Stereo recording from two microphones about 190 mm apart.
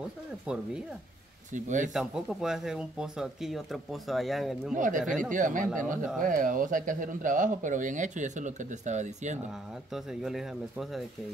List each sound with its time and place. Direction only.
0.5 s speech: 5° right (ahead or behind)
1.5 s speech: 40° right (ahead or behind)
2.0 s speech: 5° right (ahead or behind)
4.7 s speech: 45° right (ahead or behind)
5.0 s speech: centre (ahead or behind)
5.3 s speech: 45° right (ahead or behind)
9.9 s speech: centre (ahead or behind)